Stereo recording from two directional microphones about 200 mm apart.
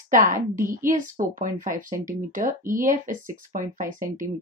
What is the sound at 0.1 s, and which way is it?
A woman's voice, 40° right (ahead or behind).